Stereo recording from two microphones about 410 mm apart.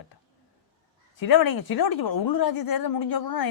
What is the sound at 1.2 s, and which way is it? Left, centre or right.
A woman's voice, left.